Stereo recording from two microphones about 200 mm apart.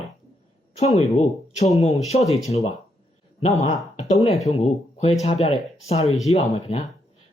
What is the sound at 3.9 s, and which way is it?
Speech, 30° left (ahead or behind).